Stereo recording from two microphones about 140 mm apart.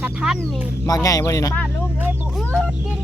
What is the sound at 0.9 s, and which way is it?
Speech, 25° left (ahead or behind).